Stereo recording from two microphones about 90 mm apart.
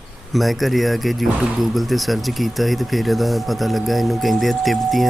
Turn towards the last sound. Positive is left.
turn(degrees=0)  # may be behind; listen again after turning